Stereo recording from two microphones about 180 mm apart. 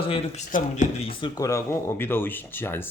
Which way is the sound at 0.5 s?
50° left (ahead or behind).